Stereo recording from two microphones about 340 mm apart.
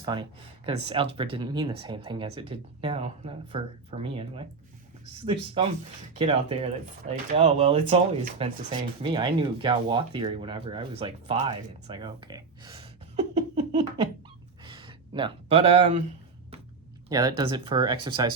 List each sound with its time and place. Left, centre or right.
0.0 s speech: centre
14.6 s a sound: centre
17.1 s speech: centre